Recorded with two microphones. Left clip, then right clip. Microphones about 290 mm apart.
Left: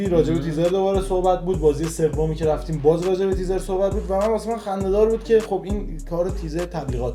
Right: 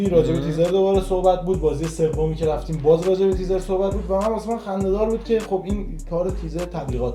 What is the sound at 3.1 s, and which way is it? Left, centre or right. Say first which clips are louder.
Speech: right 2 dB; left.